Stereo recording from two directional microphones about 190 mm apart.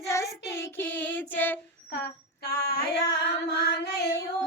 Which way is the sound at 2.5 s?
55° left (ahead or behind).